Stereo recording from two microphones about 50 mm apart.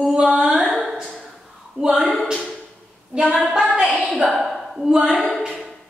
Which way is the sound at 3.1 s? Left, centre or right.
Centre.